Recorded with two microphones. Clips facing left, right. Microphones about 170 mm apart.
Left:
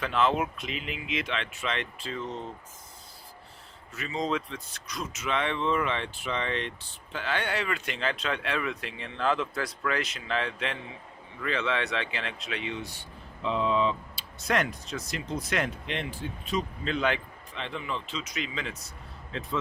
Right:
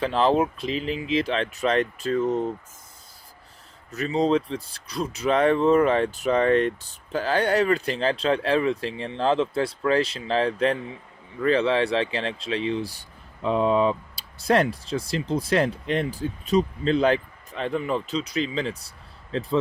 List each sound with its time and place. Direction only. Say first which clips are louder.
0.0 s speech: right 6 dB; 35° right (ahead or behind)
3.9 s speech: right 9 dB; 35° right (ahead or behind)
14.3 s speech: right 7 dB; 30° right (ahead or behind)